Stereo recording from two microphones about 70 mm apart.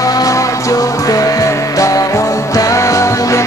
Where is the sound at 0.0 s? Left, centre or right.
Left.